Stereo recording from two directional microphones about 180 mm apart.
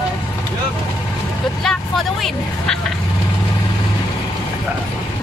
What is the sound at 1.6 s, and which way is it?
Vehicle, centre (ahead or behind).